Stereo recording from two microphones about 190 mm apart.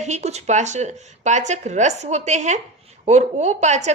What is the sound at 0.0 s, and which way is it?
A woman's voice, 35° right (ahead or behind).